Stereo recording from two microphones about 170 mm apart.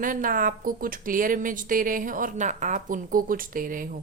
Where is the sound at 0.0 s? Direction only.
55° right (ahead or behind).